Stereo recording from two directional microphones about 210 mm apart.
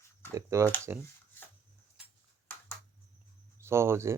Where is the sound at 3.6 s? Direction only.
10° right (ahead or behind).